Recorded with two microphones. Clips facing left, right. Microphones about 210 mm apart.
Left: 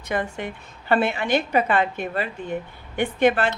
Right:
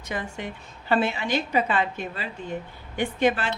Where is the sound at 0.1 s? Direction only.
60° left (ahead or behind).